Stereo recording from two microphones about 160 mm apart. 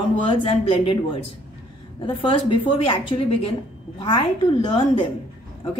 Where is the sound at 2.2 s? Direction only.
35° left (ahead or behind).